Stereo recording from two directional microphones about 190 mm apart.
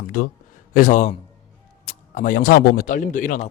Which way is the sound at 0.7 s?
45° left (ahead or behind).